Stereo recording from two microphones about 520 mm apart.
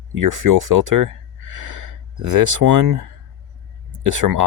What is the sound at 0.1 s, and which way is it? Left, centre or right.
Speech, right.